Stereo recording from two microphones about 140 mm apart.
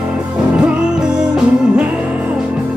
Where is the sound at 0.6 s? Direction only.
5° right (ahead or behind).